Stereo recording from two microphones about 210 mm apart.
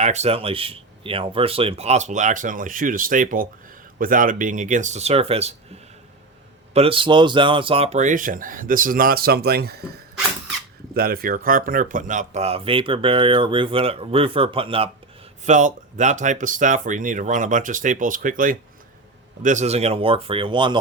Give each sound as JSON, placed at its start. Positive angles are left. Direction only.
{"t": 0.0, "sound": "speech", "side_deg": -30}
{"t": 6.7, "sound": "speech", "side_deg": -25}
{"t": 10.9, "sound": "speech", "side_deg": -45}